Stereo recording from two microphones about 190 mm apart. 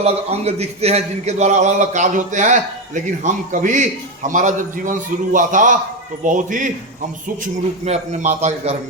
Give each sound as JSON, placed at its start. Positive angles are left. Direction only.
{"t": 0.0, "sound": "a man's voice", "side_deg": -35}